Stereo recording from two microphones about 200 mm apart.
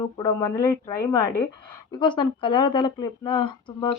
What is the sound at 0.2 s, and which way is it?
A woman's voice, 15° left (ahead or behind).